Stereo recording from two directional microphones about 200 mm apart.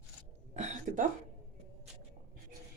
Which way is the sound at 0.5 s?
35° right (ahead or behind).